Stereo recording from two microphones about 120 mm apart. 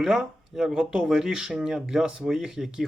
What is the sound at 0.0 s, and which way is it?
Speech, 5° right (ahead or behind).